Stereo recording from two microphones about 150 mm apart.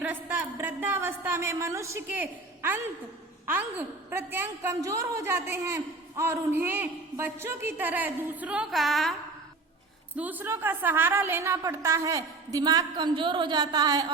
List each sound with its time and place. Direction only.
0.0 s a woman's voice: 10° right (ahead or behind)
10.2 s a woman's voice: 10° right (ahead or behind); by 14.1 s 25° right (ahead or behind)